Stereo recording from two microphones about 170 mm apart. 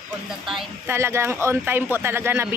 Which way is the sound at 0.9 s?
15° right (ahead or behind).